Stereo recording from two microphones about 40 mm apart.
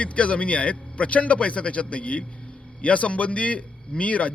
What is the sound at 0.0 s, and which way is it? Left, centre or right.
Speech, left.